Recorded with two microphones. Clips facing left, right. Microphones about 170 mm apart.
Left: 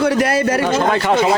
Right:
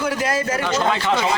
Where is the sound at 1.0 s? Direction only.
40° left (ahead or behind).